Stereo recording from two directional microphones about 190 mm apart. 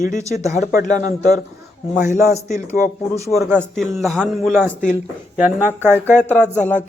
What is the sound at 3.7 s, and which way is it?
Speech, centre (ahead or behind).